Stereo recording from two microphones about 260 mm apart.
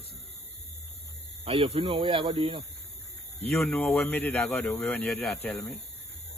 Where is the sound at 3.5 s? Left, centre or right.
Centre.